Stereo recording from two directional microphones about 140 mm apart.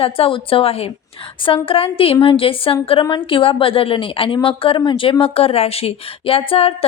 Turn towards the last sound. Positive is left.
turn(degrees=45)  # may be behind; listen again after turning